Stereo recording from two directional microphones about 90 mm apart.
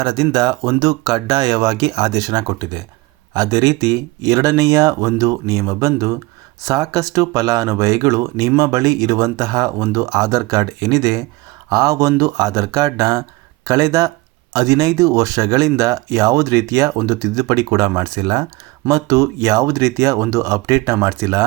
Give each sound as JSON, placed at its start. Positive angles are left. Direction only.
{"t": 0.0, "sound": "speech", "side_deg": -50}
{"t": 18.9, "sound": "speech", "side_deg": -40}